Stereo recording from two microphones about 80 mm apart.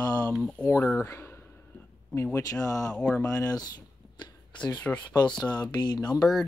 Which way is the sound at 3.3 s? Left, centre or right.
Left.